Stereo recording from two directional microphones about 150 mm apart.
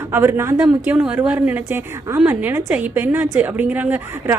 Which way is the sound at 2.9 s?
15° right (ahead or behind).